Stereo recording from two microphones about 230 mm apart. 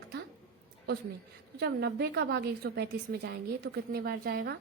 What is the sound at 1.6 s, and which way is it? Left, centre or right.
A woman's voice, right.